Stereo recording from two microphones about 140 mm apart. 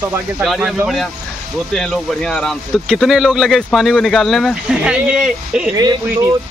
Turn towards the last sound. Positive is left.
turn(degrees=-25)  # may be behind; listen again after turning